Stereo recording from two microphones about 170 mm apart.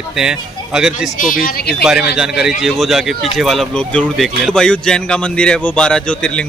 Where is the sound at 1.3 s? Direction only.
60° left (ahead or behind).